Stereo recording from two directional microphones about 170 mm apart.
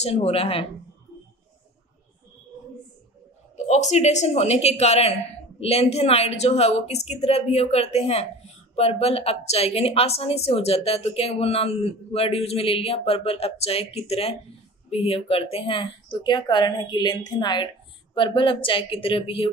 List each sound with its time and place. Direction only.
0.0 s a woman's voice: 35° left (ahead or behind)
3.5 s a woman's voice: 45° left (ahead or behind)